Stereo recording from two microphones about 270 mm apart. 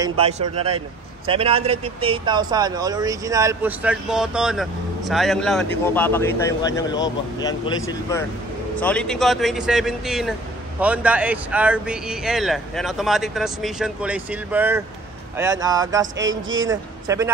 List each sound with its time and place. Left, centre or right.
0.2 s a man's voice: right
16.2 s speech: right
17.1 s speech: centre